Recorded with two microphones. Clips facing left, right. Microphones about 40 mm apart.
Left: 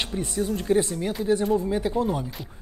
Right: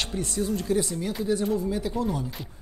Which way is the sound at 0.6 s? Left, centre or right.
Left.